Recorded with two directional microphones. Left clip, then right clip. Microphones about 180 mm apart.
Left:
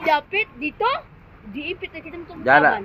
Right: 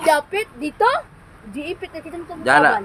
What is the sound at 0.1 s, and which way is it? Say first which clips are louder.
A woman's voice: right 2 dB; 25° right (ahead or behind).